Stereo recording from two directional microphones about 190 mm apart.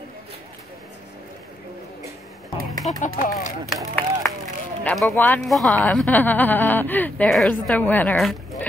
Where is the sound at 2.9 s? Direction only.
35° left (ahead or behind).